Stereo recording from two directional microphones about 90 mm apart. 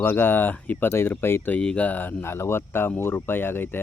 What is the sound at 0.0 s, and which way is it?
Speech, 25° left (ahead or behind).